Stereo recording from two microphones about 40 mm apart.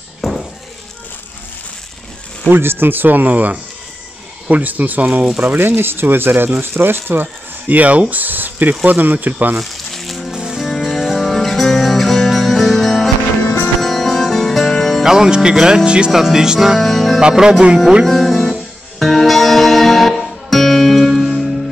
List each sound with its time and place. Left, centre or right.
0.2 s music: centre
2.5 s speech: right
5.5 s speech: right
7.6 s speech: right
9.6 s music: centre
10.3 s music: centre
10.6 s music: centre
15.0 s speech: centre
16.1 s speech: centre
16.8 s music: centre
17.2 s speech: centre
18.0 s music: centre